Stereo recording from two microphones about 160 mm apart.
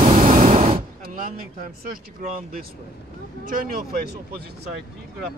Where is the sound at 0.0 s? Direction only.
45° right (ahead or behind).